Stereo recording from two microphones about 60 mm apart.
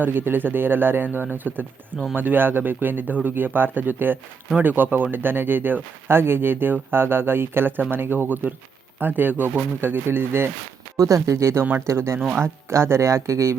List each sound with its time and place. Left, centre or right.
0.0 s speech: right
10.9 s speech: right